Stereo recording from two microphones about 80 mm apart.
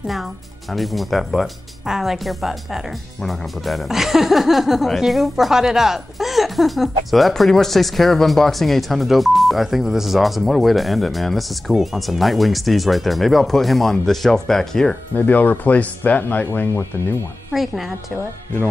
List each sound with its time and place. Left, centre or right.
0.0 s speech: centre
15.1 s speech: left
16.4 s speech: left
17.5 s speech: centre